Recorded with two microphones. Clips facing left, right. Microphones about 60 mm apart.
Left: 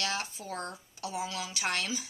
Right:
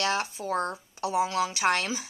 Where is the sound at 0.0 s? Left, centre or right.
Right.